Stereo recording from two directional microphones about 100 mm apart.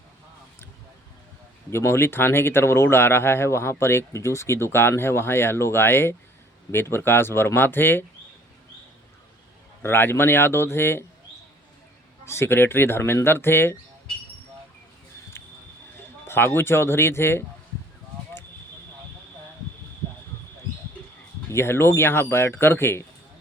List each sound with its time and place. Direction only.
1.7 s speech: 25° left (ahead or behind)
9.8 s speech: 25° left (ahead or behind)
12.2 s speech: 25° left (ahead or behind)
16.2 s speech: 20° left (ahead or behind)
21.5 s speech: 25° left (ahead or behind)